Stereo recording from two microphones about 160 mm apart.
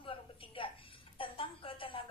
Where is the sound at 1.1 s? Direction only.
35° left (ahead or behind).